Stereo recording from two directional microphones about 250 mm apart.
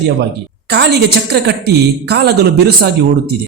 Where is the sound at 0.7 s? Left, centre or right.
Right.